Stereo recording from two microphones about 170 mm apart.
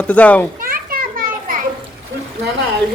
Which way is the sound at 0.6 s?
55° right (ahead or behind).